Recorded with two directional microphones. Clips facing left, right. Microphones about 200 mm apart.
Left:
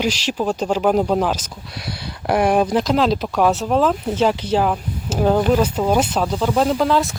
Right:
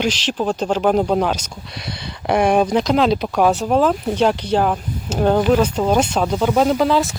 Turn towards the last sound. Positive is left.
turn(degrees=0)  # may be behind; listen again after turning